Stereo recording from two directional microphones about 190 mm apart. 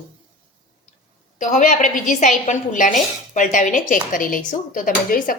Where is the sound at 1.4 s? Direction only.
40° left (ahead or behind).